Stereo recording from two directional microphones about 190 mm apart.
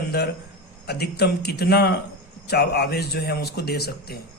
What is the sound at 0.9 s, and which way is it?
A man's voice, 60° left (ahead or behind).